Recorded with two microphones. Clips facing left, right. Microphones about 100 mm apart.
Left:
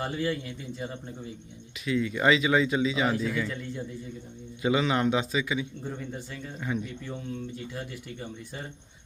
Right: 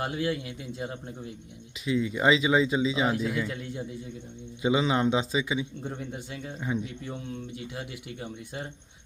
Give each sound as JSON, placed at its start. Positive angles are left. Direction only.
{"t": 0.1, "sound": "speech", "side_deg": -10}
{"t": 1.8, "sound": "a man's voice", "side_deg": -20}
{"t": 3.2, "sound": "speech", "side_deg": -10}
{"t": 4.6, "sound": "a man's voice", "side_deg": -20}